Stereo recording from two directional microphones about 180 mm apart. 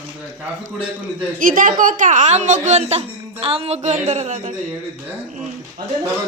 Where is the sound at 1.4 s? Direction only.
50° right (ahead or behind).